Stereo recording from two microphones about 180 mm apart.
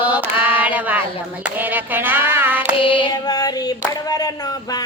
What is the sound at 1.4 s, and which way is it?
Hands, 10° right (ahead or behind).